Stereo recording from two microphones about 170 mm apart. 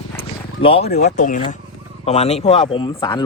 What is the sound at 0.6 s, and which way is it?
Speech, 30° left (ahead or behind).